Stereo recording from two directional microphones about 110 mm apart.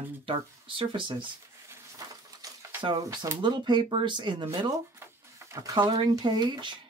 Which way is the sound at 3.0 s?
35° right (ahead or behind).